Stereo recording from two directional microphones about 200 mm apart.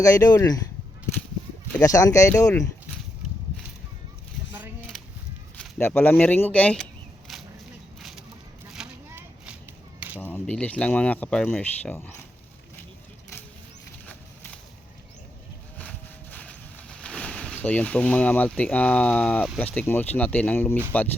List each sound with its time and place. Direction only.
0.0 s speech: 15° left (ahead or behind)
1.8 s speech: 15° left (ahead or behind)
5.5 s speech: 5° left (ahead or behind)
8.7 s a sound: 5° right (ahead or behind)
10.2 s speech: 10° left (ahead or behind)
15.8 s a sound: 10° left (ahead or behind)
20.9 s speech: 10° left (ahead or behind)